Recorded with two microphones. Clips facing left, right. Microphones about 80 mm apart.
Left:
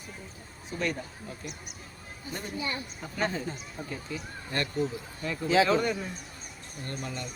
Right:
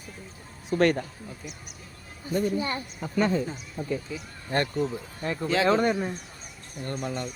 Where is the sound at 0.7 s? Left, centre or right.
Right.